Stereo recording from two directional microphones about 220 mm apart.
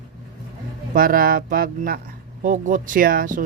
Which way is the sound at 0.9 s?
40° right (ahead or behind).